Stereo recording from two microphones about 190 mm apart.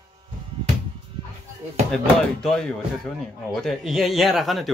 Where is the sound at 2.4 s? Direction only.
5° left (ahead or behind).